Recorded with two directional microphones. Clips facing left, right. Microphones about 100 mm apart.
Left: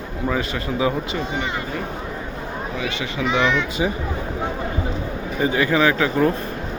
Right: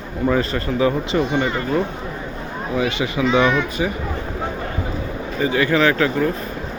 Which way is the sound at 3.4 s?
10° right (ahead or behind).